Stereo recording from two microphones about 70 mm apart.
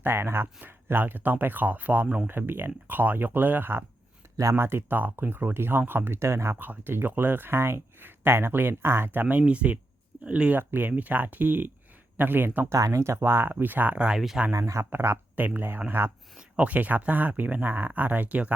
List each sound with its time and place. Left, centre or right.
0.0 s speech: right
6.6 s speech: right
9.5 s speech: centre
10.6 s speech: right
12.6 s speech: right
14.6 s speech: right; by 18.5 s centre